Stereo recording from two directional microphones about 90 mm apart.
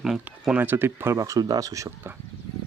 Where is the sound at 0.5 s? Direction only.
20° right (ahead or behind).